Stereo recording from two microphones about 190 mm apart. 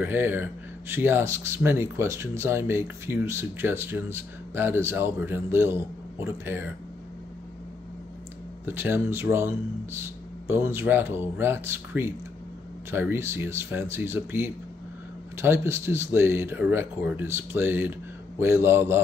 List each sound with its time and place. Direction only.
0.0 s speech: 10° right (ahead or behind)
8.6 s speech: 10° right (ahead or behind)